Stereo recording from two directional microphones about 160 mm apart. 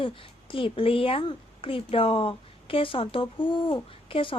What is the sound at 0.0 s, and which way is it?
Speech, 35° left (ahead or behind).